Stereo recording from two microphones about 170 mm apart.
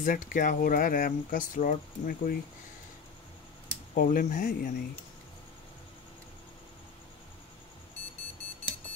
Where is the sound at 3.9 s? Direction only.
55° left (ahead or behind).